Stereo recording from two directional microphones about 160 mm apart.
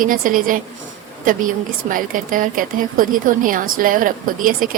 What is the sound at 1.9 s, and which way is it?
Speech, 60° right (ahead or behind).